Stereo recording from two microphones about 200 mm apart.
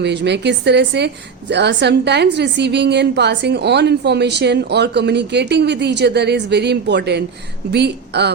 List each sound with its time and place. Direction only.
0.0 s a woman's voice: 60° right (ahead or behind)